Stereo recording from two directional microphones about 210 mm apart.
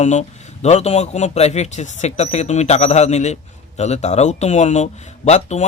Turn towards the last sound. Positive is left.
turn(degrees=35)  # may be behind; listen again after turning